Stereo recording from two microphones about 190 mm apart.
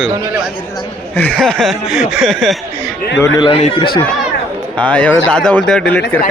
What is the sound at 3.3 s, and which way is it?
Speech, 30° left (ahead or behind).